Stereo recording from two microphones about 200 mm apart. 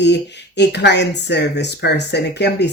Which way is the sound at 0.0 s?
60° left (ahead or behind).